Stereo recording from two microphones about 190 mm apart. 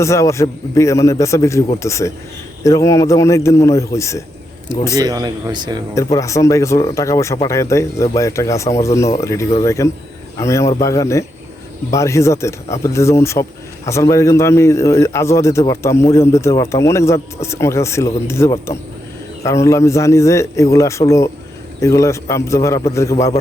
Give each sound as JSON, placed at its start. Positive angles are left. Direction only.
{"t": 0.0, "sound": "a man's voice", "side_deg": 15}
{"t": 4.9, "sound": "speech", "side_deg": -20}
{"t": 5.9, "sound": "a man's voice", "side_deg": 15}